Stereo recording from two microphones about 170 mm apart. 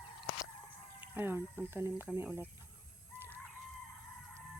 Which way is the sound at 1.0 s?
10° right (ahead or behind).